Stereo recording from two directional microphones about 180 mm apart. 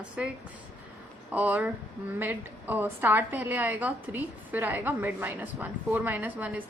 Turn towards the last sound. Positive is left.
turn(degrees=-10)  # may be behind; listen again after turning